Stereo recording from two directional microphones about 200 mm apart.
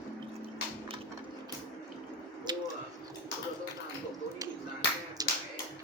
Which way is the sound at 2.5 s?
20° right (ahead or behind).